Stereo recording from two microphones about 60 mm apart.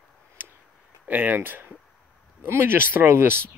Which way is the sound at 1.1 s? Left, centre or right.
Right.